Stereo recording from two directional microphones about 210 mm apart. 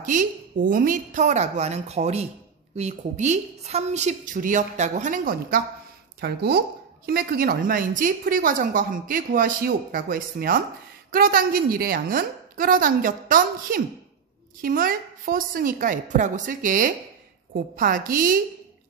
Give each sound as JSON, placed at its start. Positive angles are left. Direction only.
{"t": 0.0, "sound": "a woman's voice", "side_deg": -35}